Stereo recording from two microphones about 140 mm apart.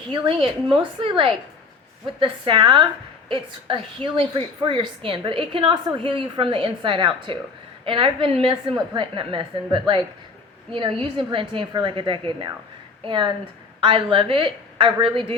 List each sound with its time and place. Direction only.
0.1 s a woman's voice: 35° right (ahead or behind)